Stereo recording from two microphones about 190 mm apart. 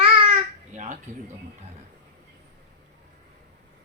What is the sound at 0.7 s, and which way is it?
Dishes, 40° right (ahead or behind).